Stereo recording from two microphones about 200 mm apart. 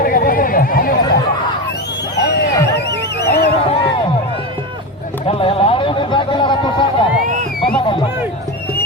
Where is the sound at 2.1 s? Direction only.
55° left (ahead or behind).